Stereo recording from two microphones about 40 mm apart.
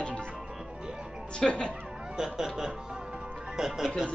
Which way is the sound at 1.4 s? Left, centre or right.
Left.